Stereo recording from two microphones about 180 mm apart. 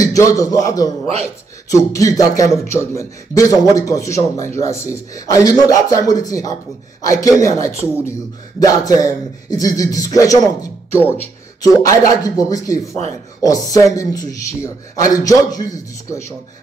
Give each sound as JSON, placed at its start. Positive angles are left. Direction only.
{"t": 0.0, "sound": "speech", "side_deg": 20}
{"t": 1.0, "sound": "a man's voice", "side_deg": -35}
{"t": 1.7, "sound": "speech", "side_deg": 20}
{"t": 7.8, "sound": "speech", "side_deg": -10}
{"t": 8.5, "sound": "speech", "side_deg": 20}
{"t": 11.6, "sound": "speech", "side_deg": 20}